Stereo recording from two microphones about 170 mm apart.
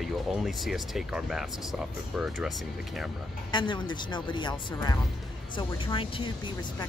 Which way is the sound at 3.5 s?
25° left (ahead or behind).